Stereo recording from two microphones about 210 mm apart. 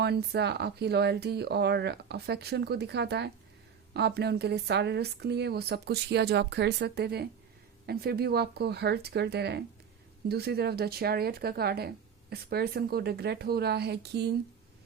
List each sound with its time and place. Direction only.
0.0 s speech: 50° right (ahead or behind)